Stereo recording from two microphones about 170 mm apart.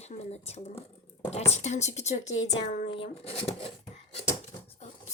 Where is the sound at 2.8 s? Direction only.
30° left (ahead or behind).